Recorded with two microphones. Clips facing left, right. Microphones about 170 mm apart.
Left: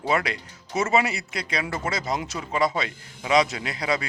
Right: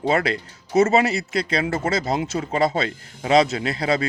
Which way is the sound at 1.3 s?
30° right (ahead or behind).